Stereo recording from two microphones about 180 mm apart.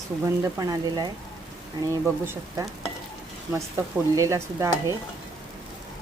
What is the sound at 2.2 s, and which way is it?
Speech, 15° right (ahead or behind).